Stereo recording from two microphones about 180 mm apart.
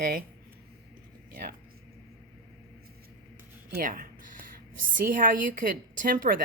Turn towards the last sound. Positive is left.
turn(degrees=-50)  # may be behind; listen again after turning